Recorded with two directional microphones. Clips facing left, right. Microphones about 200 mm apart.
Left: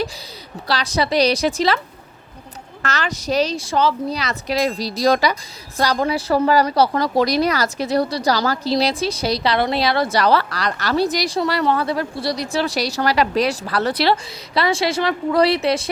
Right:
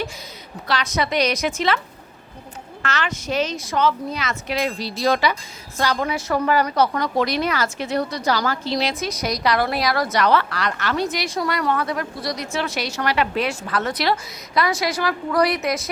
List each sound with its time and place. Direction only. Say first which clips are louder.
0.7 s a woman's voice: left 3 dB; 35° left (ahead or behind)
2.8 s a woman's voice: left 2 dB; 40° left (ahead or behind)